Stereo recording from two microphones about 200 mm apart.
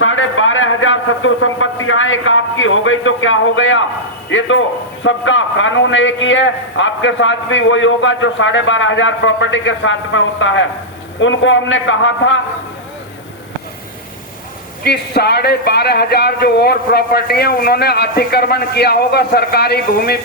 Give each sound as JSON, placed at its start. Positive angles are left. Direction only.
{"t": 0.0, "sound": "a sound", "side_deg": 85}
{"t": 4.3, "sound": "a man's voice", "side_deg": 70}
{"t": 14.8, "sound": "speech", "side_deg": 55}